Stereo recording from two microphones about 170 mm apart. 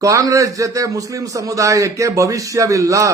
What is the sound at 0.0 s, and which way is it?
A man's voice, 20° right (ahead or behind).